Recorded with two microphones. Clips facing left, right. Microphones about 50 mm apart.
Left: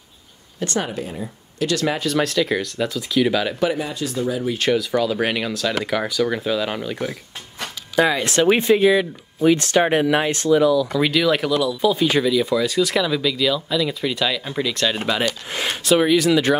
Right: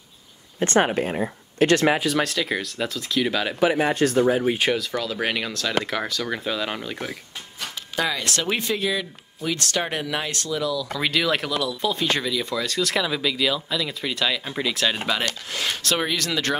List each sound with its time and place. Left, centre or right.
0.6 s speech: right
2.0 s speech: centre
3.8 s speech: right
4.7 s speech: centre
8.0 s speech: left
10.9 s speech: centre
15.5 s speech: left
15.8 s speech: centre